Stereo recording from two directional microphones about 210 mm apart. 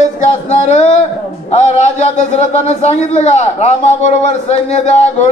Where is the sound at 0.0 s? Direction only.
30° left (ahead or behind).